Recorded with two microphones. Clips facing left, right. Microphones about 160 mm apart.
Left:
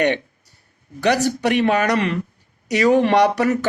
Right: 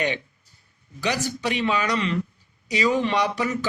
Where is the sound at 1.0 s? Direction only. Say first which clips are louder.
Left 8 dB; 65° left (ahead or behind).